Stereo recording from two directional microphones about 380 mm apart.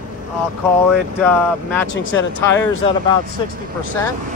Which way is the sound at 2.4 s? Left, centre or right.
Centre.